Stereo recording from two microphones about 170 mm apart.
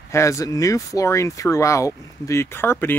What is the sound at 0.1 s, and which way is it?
Speech, 15° left (ahead or behind).